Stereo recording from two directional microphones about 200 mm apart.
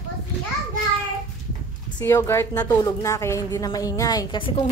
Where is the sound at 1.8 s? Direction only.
15° left (ahead or behind).